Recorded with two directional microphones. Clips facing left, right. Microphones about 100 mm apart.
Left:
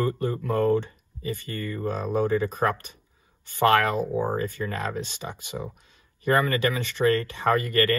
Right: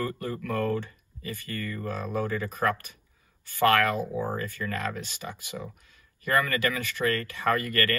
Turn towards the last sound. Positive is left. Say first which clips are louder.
# left 4 dB
turn(degrees=20)  # may be behind; listen again after turning